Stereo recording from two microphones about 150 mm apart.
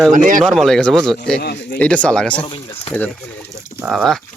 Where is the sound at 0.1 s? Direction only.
60° right (ahead or behind).